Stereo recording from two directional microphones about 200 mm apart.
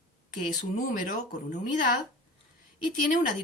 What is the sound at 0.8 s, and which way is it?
Speech, 40° left (ahead or behind).